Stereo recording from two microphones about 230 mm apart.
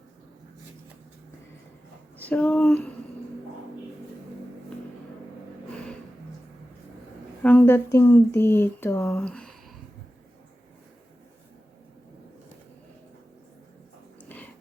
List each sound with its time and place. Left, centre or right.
2.3 s speech: centre
7.4 s speech: centre
14.3 s a sound: centre